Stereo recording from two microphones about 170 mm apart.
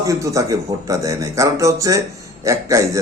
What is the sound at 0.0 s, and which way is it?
A man's voice, 20° right (ahead or behind).